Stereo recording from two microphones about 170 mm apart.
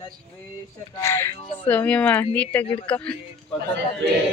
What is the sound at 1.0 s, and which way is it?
Speech, 15° left (ahead or behind).